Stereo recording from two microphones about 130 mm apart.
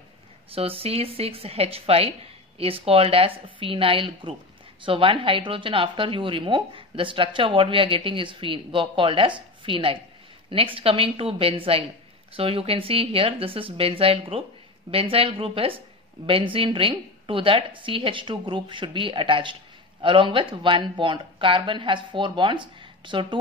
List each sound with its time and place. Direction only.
0.5 s a woman's voice: 45° right (ahead or behind)